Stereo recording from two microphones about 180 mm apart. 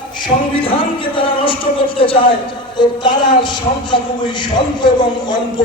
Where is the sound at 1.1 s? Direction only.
30° left (ahead or behind).